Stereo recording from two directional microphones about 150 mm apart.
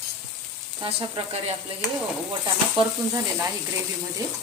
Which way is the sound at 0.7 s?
40° right (ahead or behind).